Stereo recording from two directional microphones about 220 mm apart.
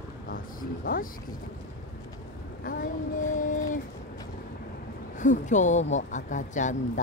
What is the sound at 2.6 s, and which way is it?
Speech, 40° left (ahead or behind).